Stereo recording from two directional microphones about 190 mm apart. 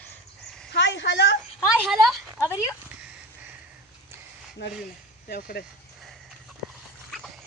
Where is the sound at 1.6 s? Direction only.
5° right (ahead or behind).